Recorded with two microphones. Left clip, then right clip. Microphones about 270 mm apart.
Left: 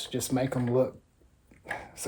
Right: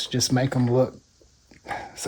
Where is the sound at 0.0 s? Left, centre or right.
Right.